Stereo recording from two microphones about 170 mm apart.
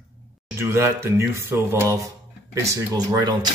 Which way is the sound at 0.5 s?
15° right (ahead or behind).